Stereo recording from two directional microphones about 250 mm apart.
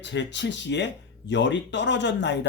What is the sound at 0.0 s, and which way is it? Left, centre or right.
Speech, left.